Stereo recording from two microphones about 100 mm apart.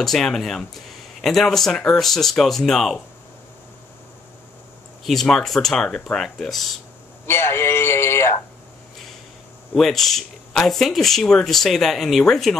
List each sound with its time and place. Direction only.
0.0 s speech: 5° left (ahead or behind)
5.0 s speech: 5° left (ahead or behind)
7.2 s speech: 25° left (ahead or behind)
9.8 s speech: 5° left (ahead or behind)